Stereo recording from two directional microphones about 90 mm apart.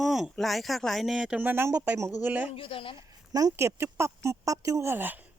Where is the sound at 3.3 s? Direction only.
40° right (ahead or behind).